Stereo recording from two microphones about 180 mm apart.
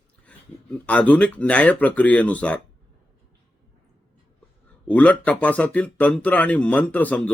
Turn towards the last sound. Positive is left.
turn(degrees=10)  # may be behind; listen again after turning